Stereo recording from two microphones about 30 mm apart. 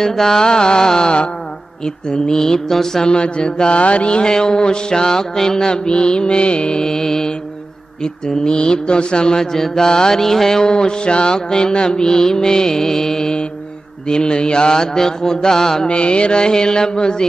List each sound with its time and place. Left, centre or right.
0.0 s mantra: centre
0.5 s mantra: left
3.1 s mantra: left
3.8 s mantra: left
4.2 s mantra: left
5.7 s mantra: left
6.8 s mantra: centre
8.5 s mantra: left
9.4 s mantra: centre
15.9 s mantra: left